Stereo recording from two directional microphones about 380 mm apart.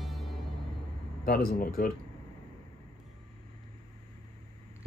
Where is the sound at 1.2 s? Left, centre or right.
Left.